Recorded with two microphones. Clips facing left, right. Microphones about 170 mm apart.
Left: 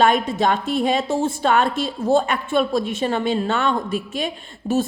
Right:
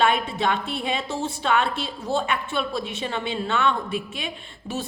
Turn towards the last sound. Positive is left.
turn(degrees=45)  # may be behind; listen again after turning